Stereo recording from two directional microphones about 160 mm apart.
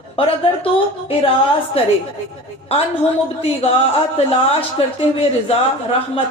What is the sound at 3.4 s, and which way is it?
A woman's voice, 40° left (ahead or behind).